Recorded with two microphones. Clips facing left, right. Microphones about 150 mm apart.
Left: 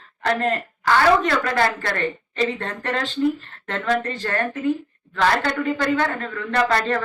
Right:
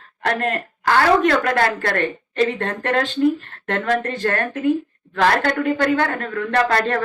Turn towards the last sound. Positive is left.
turn(degrees=-50)  # may be behind; listen again after turning